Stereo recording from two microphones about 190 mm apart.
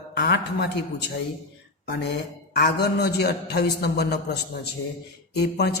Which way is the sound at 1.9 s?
60° left (ahead or behind).